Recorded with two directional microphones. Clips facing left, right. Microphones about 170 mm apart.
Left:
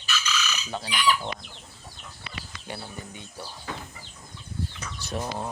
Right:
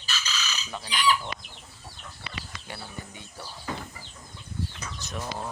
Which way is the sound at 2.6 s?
20° left (ahead or behind).